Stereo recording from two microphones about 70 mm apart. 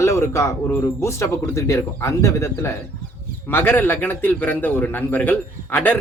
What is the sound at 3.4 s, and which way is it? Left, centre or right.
A man's voice, left.